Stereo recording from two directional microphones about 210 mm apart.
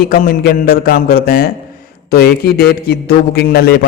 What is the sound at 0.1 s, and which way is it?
A man's voice, 45° left (ahead or behind).